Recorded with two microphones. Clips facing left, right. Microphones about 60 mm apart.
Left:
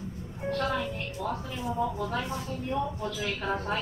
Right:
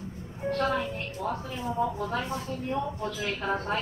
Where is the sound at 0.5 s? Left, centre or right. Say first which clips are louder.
Right 2 dB; right.